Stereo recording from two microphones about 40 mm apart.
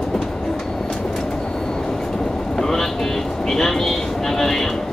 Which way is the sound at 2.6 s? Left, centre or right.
Centre.